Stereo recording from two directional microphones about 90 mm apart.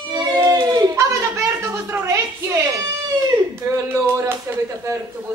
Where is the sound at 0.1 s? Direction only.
50° right (ahead or behind).